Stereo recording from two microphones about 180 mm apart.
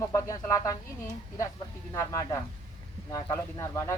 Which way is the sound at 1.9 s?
15° left (ahead or behind).